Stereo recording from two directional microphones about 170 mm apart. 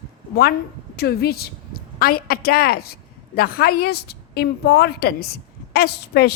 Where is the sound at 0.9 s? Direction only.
70° left (ahead or behind).